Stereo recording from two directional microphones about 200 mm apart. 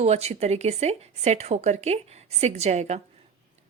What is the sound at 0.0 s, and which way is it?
A woman's voice, 35° right (ahead or behind).